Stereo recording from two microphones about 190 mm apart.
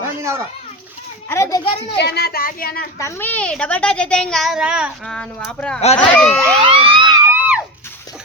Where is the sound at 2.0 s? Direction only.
60° left (ahead or behind).